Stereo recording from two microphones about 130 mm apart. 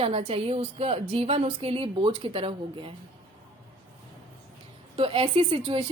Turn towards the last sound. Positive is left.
turn(degrees=-45)  # may be behind; listen again after turning